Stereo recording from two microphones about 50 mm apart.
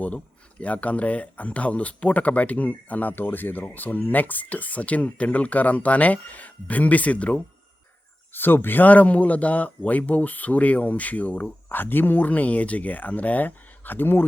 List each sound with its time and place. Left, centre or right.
0.6 s speech: left
8.3 s speech: left